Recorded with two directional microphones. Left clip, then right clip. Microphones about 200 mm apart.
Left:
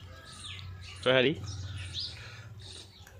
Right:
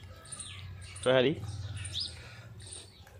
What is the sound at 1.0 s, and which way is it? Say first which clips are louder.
Speech: left 1 dB; centre (ahead or behind).